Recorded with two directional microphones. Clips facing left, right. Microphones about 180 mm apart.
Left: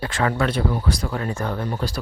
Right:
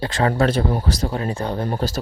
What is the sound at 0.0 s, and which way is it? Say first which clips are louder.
Speech: right 3 dB; 35° right (ahead or behind).